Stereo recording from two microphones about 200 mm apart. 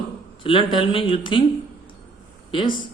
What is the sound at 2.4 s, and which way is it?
Speech, 25° left (ahead or behind).